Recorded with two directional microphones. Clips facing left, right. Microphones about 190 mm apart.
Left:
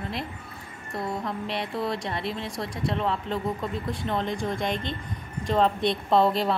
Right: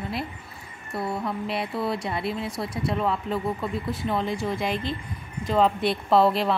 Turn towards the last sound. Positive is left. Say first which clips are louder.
# right 2 dB
turn(degrees=0)  # may be behind; listen again after turning